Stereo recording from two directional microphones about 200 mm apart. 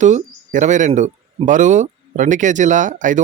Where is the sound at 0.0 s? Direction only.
35° right (ahead or behind).